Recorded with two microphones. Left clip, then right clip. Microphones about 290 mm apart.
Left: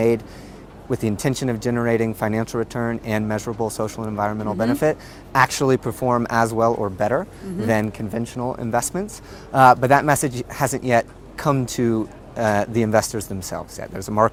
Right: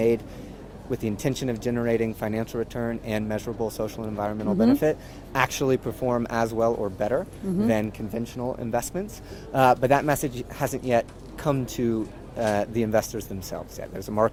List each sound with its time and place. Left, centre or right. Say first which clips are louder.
0.9 s speech: left 5 dB; left